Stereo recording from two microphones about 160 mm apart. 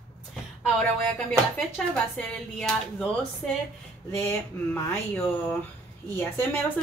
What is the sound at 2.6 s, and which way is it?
Speech, 5° left (ahead or behind).